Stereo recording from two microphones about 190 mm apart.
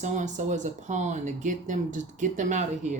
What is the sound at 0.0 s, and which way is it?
Speech, 40° right (ahead or behind).